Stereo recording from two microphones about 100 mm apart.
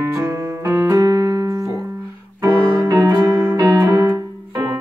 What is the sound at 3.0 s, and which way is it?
Music, 35° right (ahead or behind).